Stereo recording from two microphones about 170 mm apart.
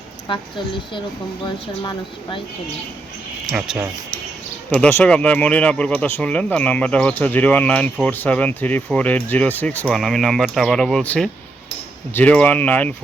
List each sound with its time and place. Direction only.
0.3 s speech: 30° left (ahead or behind)
3.5 s speech: 5° right (ahead or behind)
4.7 s speech: 10° left (ahead or behind)